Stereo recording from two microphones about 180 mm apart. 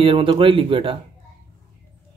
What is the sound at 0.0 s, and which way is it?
Speech, 30° right (ahead or behind).